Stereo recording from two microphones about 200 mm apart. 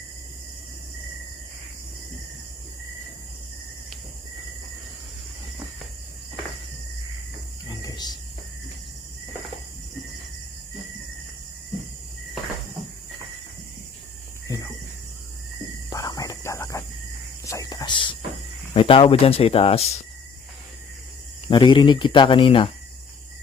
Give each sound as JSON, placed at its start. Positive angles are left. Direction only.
{"t": 7.7, "sound": "cricket", "side_deg": 15}
{"t": 14.4, "sound": "a sound", "side_deg": 20}
{"t": 15.9, "sound": "whispering", "side_deg": 20}
{"t": 17.4, "sound": "a sound", "side_deg": 15}
{"t": 18.7, "sound": "speech", "side_deg": 25}
{"t": 21.5, "sound": "speech", "side_deg": 25}